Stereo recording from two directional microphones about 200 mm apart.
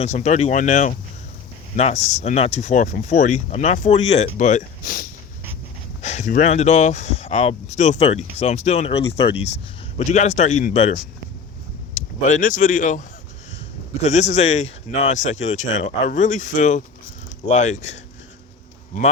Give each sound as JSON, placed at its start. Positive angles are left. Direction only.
{"t": 0.0, "sound": "speech", "side_deg": 35}
{"t": 12.2, "sound": "speech", "side_deg": 40}